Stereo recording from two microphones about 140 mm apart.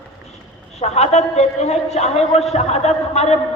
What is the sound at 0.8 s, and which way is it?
A man's voice, 50° left (ahead or behind).